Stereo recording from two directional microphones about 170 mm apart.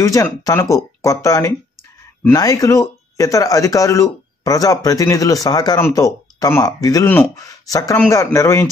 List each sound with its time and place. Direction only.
0.0 s speech: 20° left (ahead or behind)